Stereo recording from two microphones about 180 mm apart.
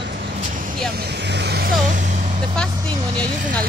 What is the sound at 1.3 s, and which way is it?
Speech, 65° right (ahead or behind).